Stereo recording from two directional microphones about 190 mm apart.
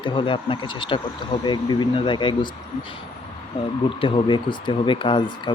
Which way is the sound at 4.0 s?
25° left (ahead or behind).